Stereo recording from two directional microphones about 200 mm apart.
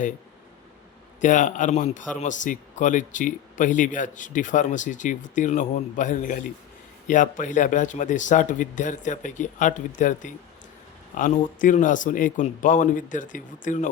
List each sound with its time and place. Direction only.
1.2 s speech: 40° left (ahead or behind)